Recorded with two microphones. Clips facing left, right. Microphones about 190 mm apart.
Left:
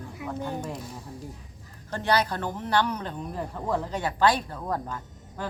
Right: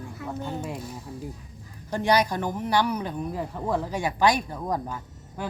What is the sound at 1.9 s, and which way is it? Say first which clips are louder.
Speech: right 3 dB; 15° right (ahead or behind).